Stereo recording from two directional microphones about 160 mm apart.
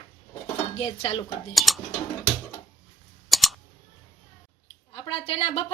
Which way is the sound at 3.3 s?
Centre (ahead or behind).